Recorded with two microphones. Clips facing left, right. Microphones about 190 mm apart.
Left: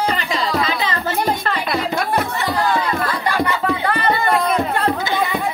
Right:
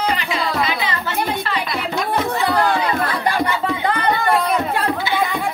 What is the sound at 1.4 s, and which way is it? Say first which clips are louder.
Music: left 3 dB; 55° left (ahead or behind).